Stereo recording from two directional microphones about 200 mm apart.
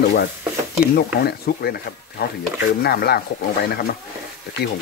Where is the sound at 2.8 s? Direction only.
50° left (ahead or behind).